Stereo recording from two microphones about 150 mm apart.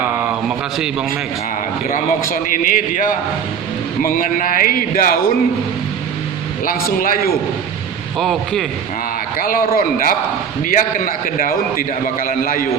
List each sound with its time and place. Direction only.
1.9 s a man's voice: 65° left (ahead or behind)
6.7 s a man's voice: 70° left (ahead or behind)
8.2 s a man's voice: centre (ahead or behind)
9.4 s a man's voice: 75° left (ahead or behind)